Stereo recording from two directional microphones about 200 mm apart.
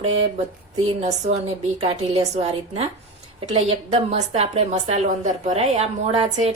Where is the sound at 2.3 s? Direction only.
30° right (ahead or behind).